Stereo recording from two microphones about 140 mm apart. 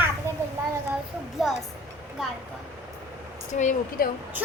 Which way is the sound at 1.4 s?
Centre (ahead or behind).